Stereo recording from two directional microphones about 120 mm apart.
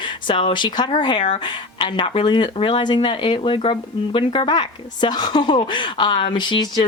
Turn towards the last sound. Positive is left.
turn(degrees=35)  # may be behind; listen again after turning